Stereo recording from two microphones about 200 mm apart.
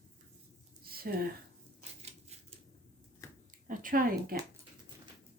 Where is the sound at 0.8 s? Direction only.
50° right (ahead or behind).